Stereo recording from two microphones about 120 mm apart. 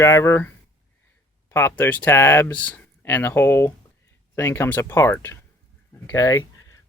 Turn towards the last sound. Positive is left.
turn(degrees=25)  # may be behind; listen again after turning